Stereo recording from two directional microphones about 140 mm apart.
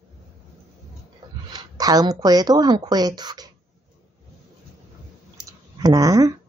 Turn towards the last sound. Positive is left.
turn(degrees=-25)  # may be behind; listen again after turning